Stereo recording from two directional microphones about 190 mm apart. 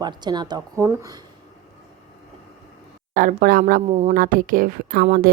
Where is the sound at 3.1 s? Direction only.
45° right (ahead or behind).